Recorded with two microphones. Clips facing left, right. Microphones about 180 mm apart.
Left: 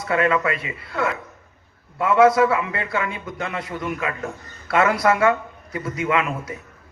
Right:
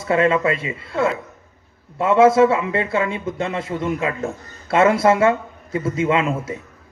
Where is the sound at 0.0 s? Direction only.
25° right (ahead or behind).